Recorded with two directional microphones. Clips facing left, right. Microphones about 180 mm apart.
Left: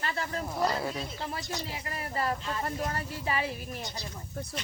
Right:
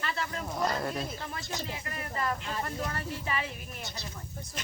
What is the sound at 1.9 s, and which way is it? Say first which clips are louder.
A woman's voice: left 2 dB; 35° left (ahead or behind).